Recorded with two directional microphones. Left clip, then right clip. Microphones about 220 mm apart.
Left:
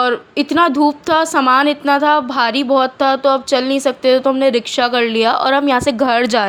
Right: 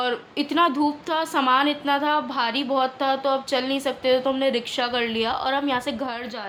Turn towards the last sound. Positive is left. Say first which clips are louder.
# left 17 dB
turn(degrees=50)  # may be behind; listen again after turning